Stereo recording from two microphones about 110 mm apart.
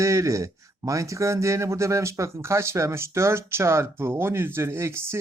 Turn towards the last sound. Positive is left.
turn(degrees=-25)  # may be behind; listen again after turning